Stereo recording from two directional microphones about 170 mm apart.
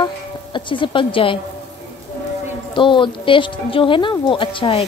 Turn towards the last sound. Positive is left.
turn(degrees=30)  # may be behind; listen again after turning